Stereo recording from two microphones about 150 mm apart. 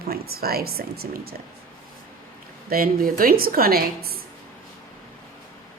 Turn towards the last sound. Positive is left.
turn(degrees=-90)